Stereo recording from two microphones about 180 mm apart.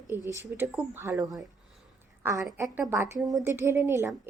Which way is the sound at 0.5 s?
10° right (ahead or behind).